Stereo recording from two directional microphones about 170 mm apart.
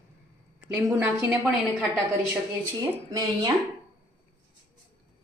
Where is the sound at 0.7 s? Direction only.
10° right (ahead or behind).